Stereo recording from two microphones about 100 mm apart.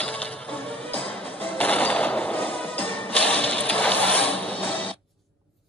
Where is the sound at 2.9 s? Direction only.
15° left (ahead or behind).